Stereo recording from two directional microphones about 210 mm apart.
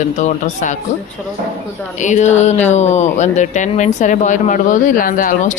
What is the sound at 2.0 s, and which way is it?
Speech, 35° left (ahead or behind).